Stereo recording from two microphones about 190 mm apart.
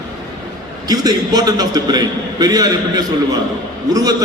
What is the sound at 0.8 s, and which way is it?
A man's voice, 20° right (ahead or behind).